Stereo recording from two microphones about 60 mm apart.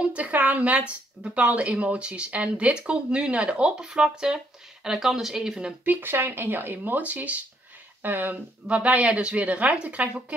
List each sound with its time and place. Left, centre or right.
0.0 s speech: right
5.9 s speech: right